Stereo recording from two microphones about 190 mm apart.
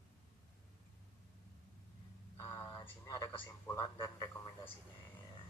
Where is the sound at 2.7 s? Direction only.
20° left (ahead or behind).